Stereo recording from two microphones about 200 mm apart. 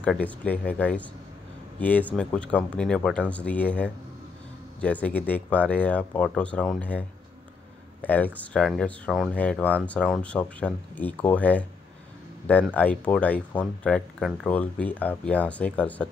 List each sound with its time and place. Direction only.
0.0 s speech: 5° left (ahead or behind)